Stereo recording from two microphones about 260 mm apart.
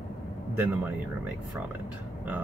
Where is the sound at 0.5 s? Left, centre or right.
Centre.